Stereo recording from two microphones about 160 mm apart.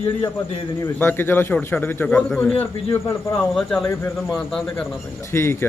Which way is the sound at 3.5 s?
5° left (ahead or behind).